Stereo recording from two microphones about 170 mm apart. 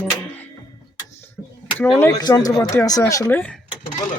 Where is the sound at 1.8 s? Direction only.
10° left (ahead or behind).